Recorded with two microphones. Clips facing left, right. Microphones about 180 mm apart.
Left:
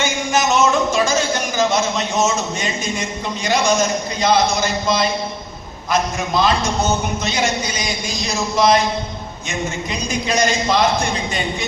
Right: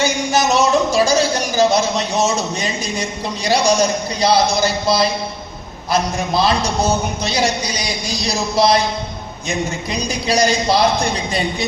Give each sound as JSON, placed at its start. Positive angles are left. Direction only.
{"t": 0.0, "sound": "speech", "side_deg": -35}